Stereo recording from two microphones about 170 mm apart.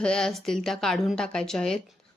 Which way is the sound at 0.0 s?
5° left (ahead or behind).